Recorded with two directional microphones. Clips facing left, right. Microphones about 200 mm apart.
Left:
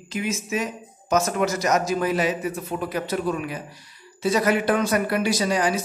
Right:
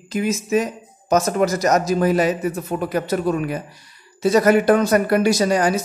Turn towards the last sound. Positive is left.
turn(degrees=-45)  # may be behind; listen again after turning